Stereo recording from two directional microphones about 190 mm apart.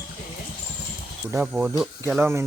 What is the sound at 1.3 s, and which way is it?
Speech, 5° right (ahead or behind).